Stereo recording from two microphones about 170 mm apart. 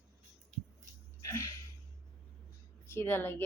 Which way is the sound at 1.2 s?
15° left (ahead or behind).